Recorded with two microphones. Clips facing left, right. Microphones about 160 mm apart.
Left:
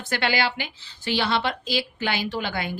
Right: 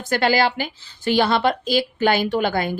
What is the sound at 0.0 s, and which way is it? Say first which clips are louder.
A woman's voice: right 6 dB; 40° right (ahead or behind).